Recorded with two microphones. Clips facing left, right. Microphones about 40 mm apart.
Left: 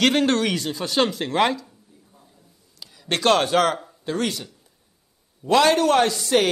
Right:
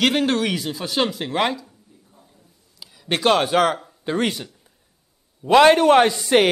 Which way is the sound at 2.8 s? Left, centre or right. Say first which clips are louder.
Right 2 dB; centre.